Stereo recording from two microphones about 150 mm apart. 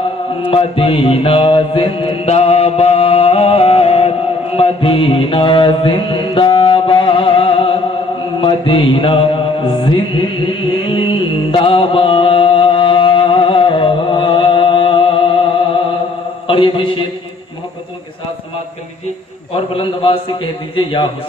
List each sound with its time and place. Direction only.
0.5 s mantra: 40° left (ahead or behind)
16.4 s a sound: 35° left (ahead or behind)
19.5 s a man's voice: 40° left (ahead or behind)